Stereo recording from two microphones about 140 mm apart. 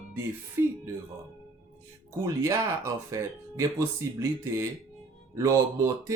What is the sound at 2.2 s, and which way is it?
Speech, 20° right (ahead or behind).